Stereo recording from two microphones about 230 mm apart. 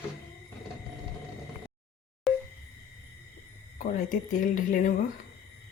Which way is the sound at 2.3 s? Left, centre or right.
Centre.